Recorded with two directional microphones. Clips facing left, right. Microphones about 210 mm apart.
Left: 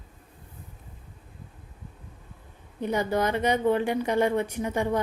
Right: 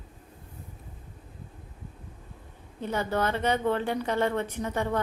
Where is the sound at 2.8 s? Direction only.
15° left (ahead or behind).